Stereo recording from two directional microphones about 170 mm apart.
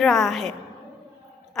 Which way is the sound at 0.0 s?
Centre (ahead or behind).